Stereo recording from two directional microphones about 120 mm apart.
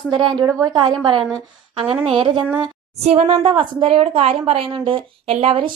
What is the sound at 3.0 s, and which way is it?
A woman's voice, 55° right (ahead or behind).